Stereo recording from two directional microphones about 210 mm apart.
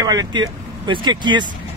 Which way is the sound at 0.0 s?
20° right (ahead or behind).